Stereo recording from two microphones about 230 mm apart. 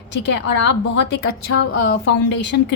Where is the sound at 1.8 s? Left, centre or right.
Left.